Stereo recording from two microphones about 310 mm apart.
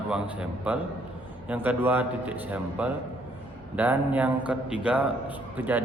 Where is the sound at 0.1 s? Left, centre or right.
Centre.